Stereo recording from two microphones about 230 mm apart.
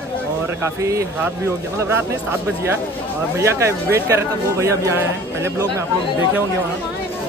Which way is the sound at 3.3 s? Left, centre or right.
Centre.